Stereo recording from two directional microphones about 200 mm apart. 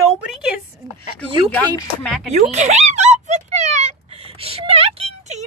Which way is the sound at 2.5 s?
35° right (ahead or behind).